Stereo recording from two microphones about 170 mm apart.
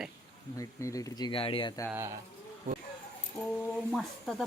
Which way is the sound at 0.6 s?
20° left (ahead or behind).